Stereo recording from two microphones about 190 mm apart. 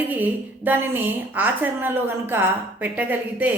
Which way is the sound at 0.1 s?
10° right (ahead or behind).